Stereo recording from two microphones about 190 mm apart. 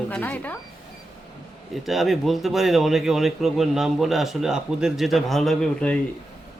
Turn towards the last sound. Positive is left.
turn(degrees=5)  # may be behind; listen again after turning